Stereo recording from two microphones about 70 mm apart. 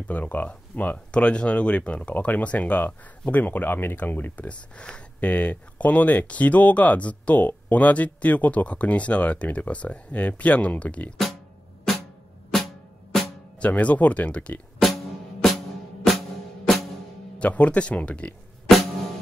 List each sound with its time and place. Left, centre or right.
0.1 s speech: left
12.4 s drum: centre
13.6 s speech: centre
15.4 s music: centre
17.4 s speech: centre